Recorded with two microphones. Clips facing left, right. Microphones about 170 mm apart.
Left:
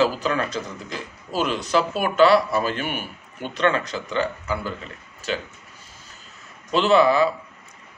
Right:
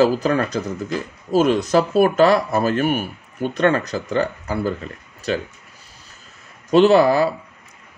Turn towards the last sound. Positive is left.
turn(degrees=-40)  # may be behind; listen again after turning